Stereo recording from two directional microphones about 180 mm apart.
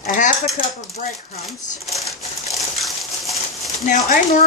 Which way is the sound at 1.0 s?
45° left (ahead or behind).